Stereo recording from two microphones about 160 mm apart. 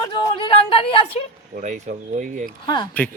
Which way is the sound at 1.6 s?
50° right (ahead or behind).